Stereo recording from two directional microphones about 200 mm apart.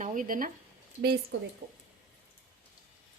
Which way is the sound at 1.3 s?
60° right (ahead or behind).